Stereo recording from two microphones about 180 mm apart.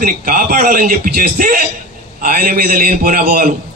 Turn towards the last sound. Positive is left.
turn(degrees=-55)  # may be behind; listen again after turning